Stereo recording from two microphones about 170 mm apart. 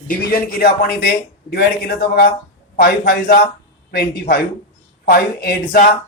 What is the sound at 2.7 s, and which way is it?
Speech, 60° left (ahead or behind).